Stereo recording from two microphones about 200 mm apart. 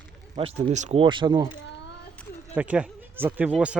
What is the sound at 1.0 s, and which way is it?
Speech, 25° right (ahead or behind).